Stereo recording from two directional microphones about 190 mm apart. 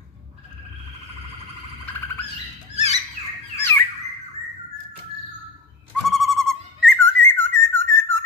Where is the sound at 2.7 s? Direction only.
35° left (ahead or behind).